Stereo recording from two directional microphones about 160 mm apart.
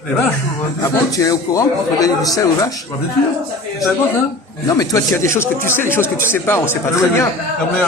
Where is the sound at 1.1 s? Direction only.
20° left (ahead or behind).